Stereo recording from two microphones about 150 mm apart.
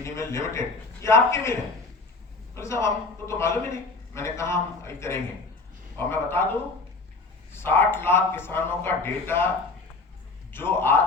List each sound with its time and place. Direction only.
0.0 s a man's voice: 20° left (ahead or behind)
2.6 s a man's voice: 20° left (ahead or behind)
10.5 s a man's voice: 15° left (ahead or behind)